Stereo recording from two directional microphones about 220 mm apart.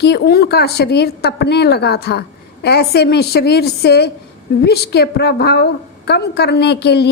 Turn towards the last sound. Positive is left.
turn(degrees=50)  # may be behind; listen again after turning